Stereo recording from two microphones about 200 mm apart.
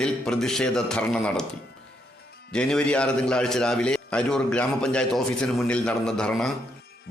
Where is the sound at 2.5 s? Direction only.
5° left (ahead or behind).